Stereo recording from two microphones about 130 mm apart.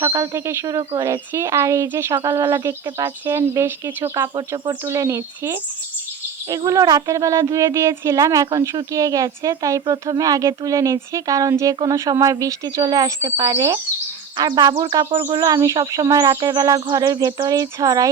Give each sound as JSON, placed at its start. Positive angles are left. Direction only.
{"t": 0.0, "sound": "speech", "side_deg": -25}
{"t": 6.7, "sound": "speech", "side_deg": -30}